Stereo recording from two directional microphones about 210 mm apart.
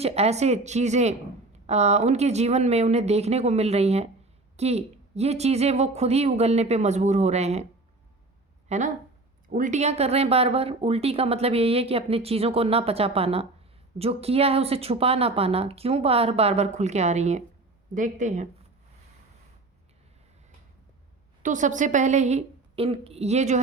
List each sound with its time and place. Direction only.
0.0 s a woman's voice: 30° right (ahead or behind)
8.7 s a woman's voice: 30° right (ahead or behind)
21.4 s a woman's voice: 35° right (ahead or behind)